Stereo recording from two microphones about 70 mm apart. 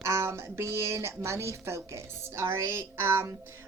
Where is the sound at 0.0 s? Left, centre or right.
Right.